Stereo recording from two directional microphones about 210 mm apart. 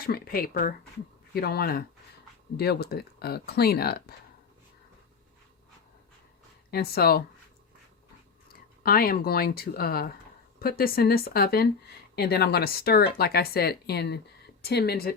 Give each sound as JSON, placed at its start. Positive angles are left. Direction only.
{"t": 0.0, "sound": "speech", "side_deg": 45}
{"t": 6.7, "sound": "speech", "side_deg": 45}
{"t": 8.8, "sound": "speech", "side_deg": 45}